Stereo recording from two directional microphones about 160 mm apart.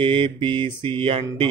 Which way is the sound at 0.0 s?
30° right (ahead or behind).